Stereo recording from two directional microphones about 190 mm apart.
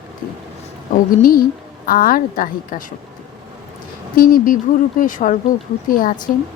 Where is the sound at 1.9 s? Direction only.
50° left (ahead or behind).